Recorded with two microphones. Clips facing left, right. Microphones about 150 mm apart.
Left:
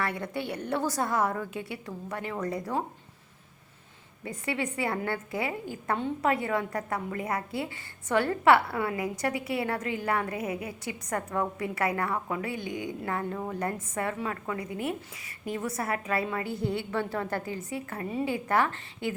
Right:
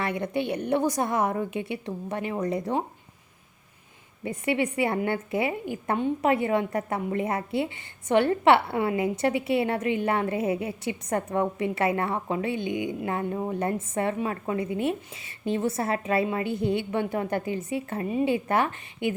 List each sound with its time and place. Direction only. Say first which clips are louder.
0.0 s a woman's voice: right 4 dB; 20° right (ahead or behind)
4.2 s a woman's voice: right 6 dB; 20° right (ahead or behind)